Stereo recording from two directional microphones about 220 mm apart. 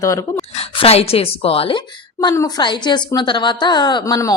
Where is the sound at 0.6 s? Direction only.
25° left (ahead or behind).